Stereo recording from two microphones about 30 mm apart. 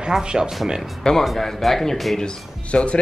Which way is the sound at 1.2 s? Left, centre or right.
Centre.